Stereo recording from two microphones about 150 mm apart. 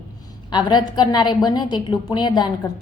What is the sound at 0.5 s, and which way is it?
A woman's voice, 30° left (ahead or behind).